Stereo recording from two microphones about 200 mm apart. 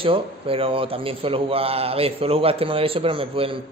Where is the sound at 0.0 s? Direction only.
25° right (ahead or behind).